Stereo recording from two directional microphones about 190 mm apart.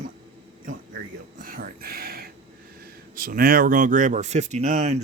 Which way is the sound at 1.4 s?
50° right (ahead or behind).